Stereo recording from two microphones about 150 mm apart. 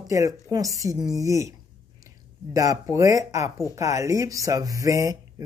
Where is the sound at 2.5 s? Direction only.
20° right (ahead or behind).